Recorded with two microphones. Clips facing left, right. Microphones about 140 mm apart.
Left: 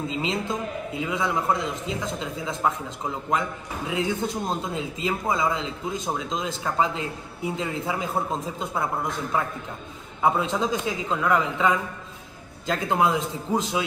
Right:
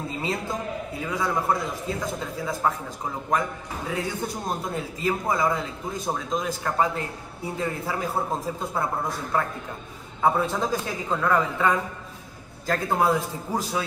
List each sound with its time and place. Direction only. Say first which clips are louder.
0.1 s a man's voice: left 2 dB; 20° left (ahead or behind)
10.4 s a man's voice: left 1 dB; 15° left (ahead or behind)